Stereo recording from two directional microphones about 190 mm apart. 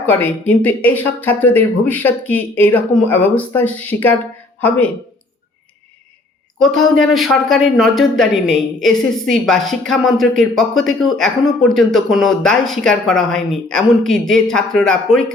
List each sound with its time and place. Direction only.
0.0 s speech: 10° left (ahead or behind)
6.6 s speech: centre (ahead or behind)